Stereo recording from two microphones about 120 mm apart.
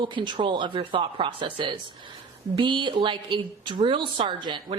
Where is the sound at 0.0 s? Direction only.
40° right (ahead or behind).